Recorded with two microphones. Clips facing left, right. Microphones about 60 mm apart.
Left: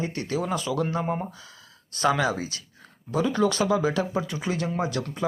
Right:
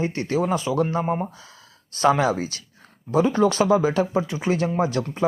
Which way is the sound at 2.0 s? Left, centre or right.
Right.